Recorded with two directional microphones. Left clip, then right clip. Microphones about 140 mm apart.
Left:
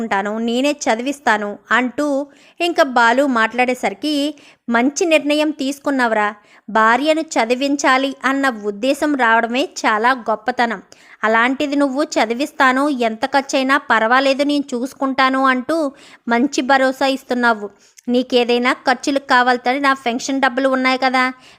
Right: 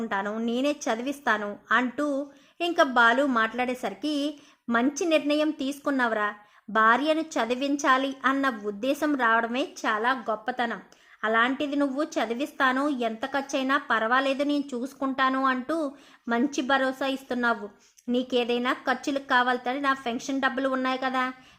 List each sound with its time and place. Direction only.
0.0 s a woman's voice: 35° left (ahead or behind)